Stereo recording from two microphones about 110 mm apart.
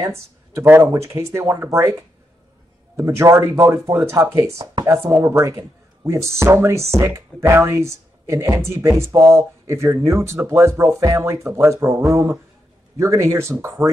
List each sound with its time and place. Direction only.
0.0 s speech: 25° right (ahead or behind)
3.0 s speech: 25° right (ahead or behind)